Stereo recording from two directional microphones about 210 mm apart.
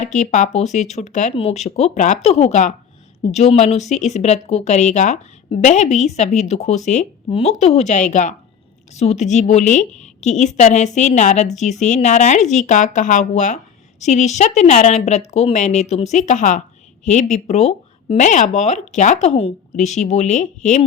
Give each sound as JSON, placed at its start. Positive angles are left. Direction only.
{"t": 0.0, "sound": "a woman's voice", "side_deg": 35}